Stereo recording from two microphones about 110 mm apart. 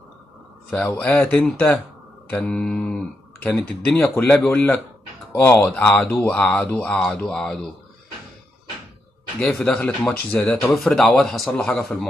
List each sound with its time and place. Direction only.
0.8 s a man's voice: 15° left (ahead or behind)
9.4 s speech: 5° left (ahead or behind)
10.7 s a man's voice: centre (ahead or behind)